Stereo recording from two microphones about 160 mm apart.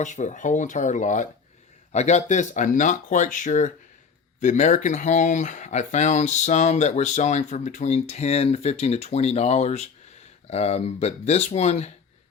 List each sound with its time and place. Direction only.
0.0 s speech: 50° left (ahead or behind)